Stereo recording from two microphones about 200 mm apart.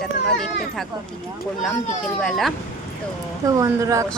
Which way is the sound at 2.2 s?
Centre (ahead or behind).